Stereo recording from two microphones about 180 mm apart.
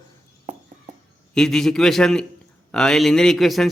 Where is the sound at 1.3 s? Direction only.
5° left (ahead or behind).